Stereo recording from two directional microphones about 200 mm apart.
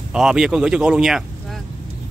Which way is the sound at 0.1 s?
5° right (ahead or behind).